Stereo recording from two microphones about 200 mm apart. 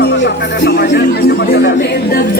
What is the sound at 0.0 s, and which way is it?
Music, 60° left (ahead or behind).